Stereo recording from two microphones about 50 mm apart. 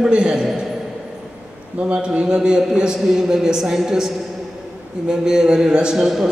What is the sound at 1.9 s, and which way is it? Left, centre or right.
A man's voice, centre.